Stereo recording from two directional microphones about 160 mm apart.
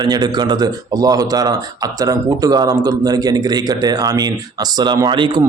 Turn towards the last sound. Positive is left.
turn(degrees=-30)  # may be behind; listen again after turning